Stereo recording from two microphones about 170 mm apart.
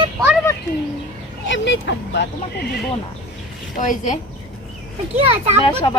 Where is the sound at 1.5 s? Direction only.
90° left.